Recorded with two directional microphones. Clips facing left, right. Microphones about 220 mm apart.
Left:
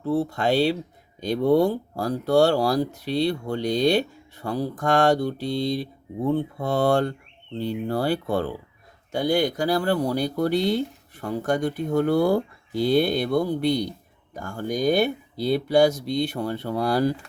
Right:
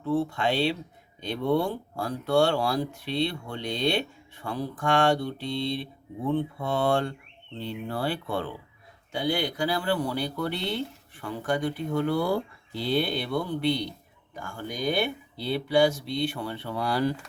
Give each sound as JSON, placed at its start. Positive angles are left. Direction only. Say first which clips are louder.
{"t": 0.0, "sound": "speech", "louder": "left 3 dB", "side_deg": 40}